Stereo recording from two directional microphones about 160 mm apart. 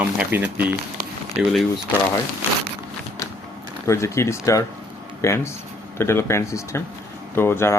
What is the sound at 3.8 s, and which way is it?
Speech, 15° left (ahead or behind).